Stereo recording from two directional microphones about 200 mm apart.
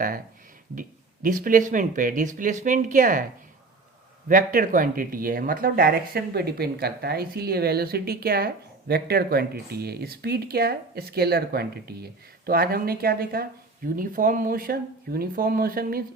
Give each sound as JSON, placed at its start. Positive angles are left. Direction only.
{"t": 0.8, "sound": "speech", "side_deg": -45}
{"t": 4.3, "sound": "speech", "side_deg": -45}